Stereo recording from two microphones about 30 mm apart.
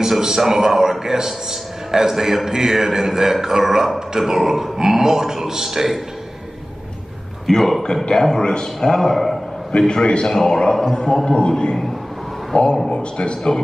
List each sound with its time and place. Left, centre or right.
0.0 s a man's voice: centre
7.4 s speech: centre
9.7 s a man's voice: left
10.2 s a man's voice: centre; by 13.6 s left